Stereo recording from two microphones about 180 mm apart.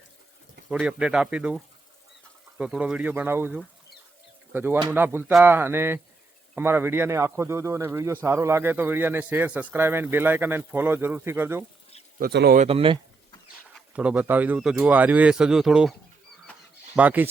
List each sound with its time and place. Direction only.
0.7 s speech: 5° right (ahead or behind)
12.2 s speech: 60° right (ahead or behind)
12.5 s speech: 30° right (ahead or behind)
13.7 s speech: 5° right (ahead or behind)